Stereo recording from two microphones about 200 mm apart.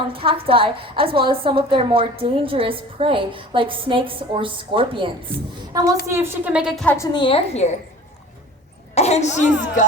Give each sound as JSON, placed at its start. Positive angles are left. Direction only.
{"t": 0.1, "sound": "a woman's voice", "side_deg": -25}
{"t": 6.9, "sound": "a woman's voice", "side_deg": 20}
{"t": 9.0, "sound": "a woman's voice", "side_deg": 35}